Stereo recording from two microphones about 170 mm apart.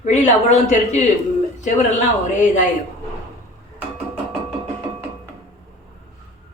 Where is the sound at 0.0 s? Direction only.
40° left (ahead or behind).